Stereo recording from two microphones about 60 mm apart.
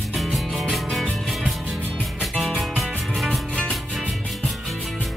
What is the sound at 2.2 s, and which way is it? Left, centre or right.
Music, centre.